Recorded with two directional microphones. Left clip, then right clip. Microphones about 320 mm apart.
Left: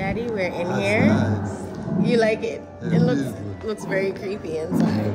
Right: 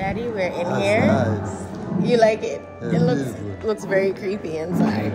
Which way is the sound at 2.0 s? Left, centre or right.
Centre.